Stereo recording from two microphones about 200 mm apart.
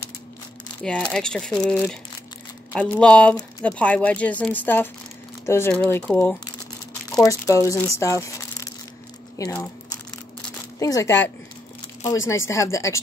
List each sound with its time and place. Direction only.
0.8 s speech: 5° left (ahead or behind)